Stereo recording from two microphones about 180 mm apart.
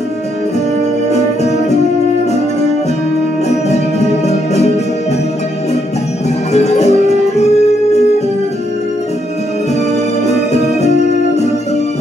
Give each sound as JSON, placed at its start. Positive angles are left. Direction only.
{"t": 6.5, "sound": "music", "side_deg": 40}
{"t": 10.2, "sound": "music", "side_deg": 40}